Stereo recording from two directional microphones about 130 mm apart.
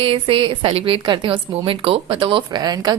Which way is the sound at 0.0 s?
45° right (ahead or behind).